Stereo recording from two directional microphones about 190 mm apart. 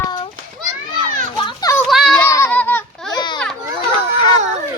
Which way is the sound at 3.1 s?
25° left (ahead or behind).